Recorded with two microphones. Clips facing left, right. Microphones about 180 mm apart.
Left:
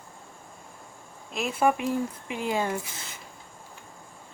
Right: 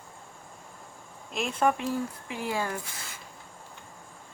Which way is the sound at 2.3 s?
20° left (ahead or behind).